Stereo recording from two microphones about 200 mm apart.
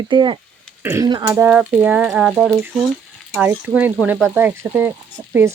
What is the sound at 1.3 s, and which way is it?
Speech, 10° right (ahead or behind).